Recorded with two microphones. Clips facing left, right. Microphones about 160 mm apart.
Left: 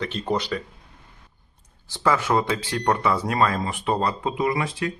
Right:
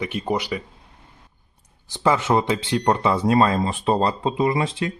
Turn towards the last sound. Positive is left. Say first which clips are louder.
# right 3 dB
turn(degrees=-25)  # may be behind; listen again after turning